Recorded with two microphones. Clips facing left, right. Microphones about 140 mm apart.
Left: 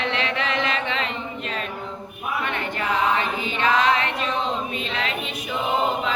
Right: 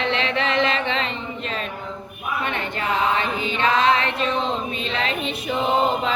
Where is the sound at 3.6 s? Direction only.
30° right (ahead or behind).